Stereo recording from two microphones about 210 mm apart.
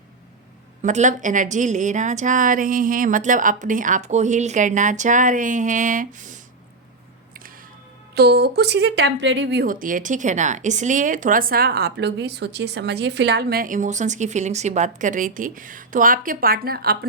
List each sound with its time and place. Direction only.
0.8 s speech: 35° right (ahead or behind)
8.1 s speech: 50° right (ahead or behind)